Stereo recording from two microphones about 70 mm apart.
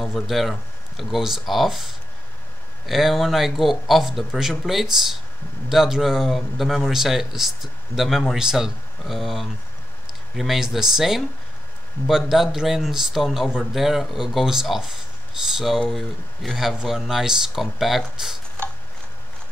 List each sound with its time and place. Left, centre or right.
0.0 s speech: centre